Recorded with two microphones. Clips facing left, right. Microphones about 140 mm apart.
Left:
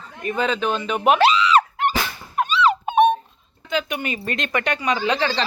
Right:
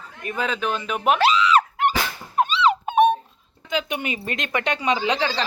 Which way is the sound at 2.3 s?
30° right (ahead or behind).